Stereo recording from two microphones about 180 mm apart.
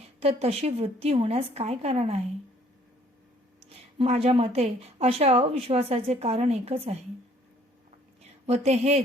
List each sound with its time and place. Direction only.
0.2 s speech: 35° right (ahead or behind)
3.9 s speech: 35° right (ahead or behind)
8.2 s a woman's voice: 35° right (ahead or behind)